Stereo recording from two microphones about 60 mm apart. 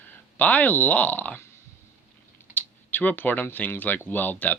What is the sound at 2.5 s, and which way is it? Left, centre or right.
Computer keyboard, left.